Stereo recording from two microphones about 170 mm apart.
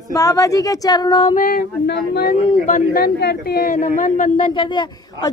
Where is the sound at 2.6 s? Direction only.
55° left (ahead or behind).